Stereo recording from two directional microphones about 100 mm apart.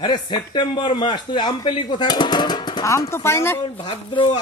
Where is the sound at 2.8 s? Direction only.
30° left (ahead or behind).